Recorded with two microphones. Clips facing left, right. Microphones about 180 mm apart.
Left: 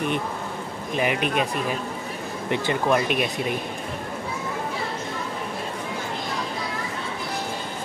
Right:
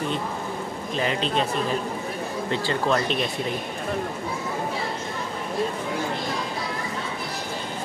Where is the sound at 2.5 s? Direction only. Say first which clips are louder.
Left 2 dB; 15° left (ahead or behind).